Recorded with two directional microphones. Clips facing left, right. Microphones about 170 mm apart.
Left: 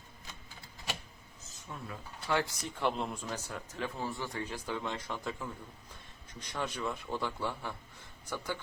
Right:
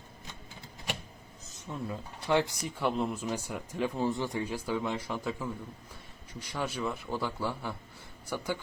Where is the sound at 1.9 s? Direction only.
20° right (ahead or behind).